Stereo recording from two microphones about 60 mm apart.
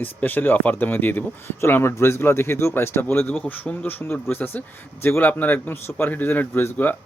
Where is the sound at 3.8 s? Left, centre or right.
Left.